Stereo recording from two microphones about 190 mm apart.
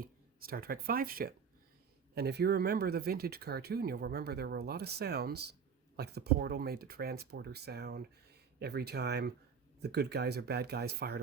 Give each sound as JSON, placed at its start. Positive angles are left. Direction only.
{"t": 0.0, "sound": "speech", "side_deg": -50}